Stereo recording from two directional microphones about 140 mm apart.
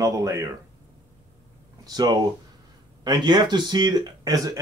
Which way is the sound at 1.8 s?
25° right (ahead or behind).